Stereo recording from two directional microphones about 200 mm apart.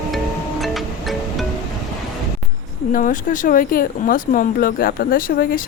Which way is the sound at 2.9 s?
40° left (ahead or behind).